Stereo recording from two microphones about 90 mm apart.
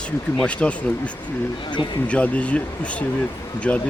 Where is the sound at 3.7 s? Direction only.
15° left (ahead or behind).